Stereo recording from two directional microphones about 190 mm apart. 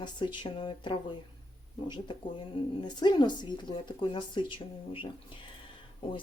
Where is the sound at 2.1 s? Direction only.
25° left (ahead or behind).